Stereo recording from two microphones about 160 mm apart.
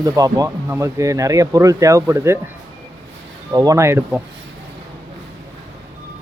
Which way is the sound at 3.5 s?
25° right (ahead or behind).